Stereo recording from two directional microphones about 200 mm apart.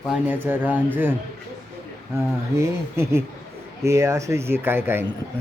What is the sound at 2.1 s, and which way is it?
Speech, 15° right (ahead or behind).